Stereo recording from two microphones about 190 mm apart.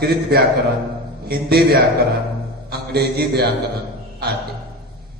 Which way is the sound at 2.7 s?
55° right (ahead or behind).